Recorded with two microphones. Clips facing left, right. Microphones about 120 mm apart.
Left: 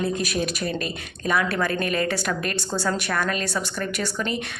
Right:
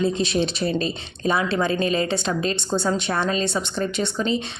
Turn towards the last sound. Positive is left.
turn(degrees=-20)  # may be behind; listen again after turning